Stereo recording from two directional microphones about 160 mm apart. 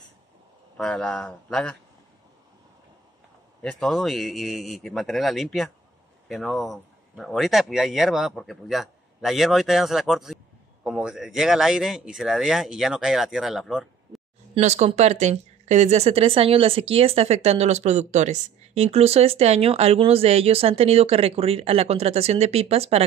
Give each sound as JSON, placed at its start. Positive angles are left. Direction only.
{"t": 0.7, "sound": "speech", "side_deg": 5}
{"t": 3.6, "sound": "speech", "side_deg": 0}
{"t": 14.5, "sound": "a woman's voice", "side_deg": -45}